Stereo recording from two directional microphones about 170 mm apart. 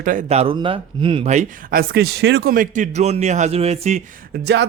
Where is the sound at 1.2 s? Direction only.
50° right (ahead or behind).